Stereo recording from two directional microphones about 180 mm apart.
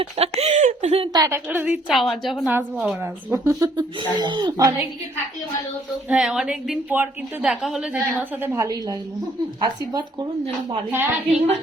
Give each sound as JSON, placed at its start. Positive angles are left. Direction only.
{"t": 0.0, "sound": "speech", "side_deg": -35}
{"t": 1.1, "sound": "a woman's voice", "side_deg": -15}
{"t": 3.6, "sound": "speech", "side_deg": -25}
{"t": 6.1, "sound": "a woman's voice", "side_deg": -5}
{"t": 11.3, "sound": "a woman's voice", "side_deg": -40}